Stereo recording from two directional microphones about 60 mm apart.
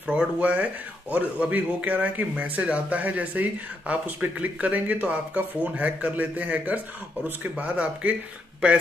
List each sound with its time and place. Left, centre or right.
0.0 s speech: right